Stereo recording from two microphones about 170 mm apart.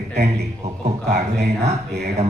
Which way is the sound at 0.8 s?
40° right (ahead or behind).